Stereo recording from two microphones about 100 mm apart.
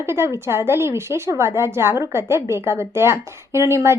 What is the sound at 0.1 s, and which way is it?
Speech, 25° right (ahead or behind).